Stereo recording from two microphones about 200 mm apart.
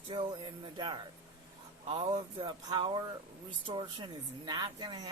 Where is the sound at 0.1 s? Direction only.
25° right (ahead or behind).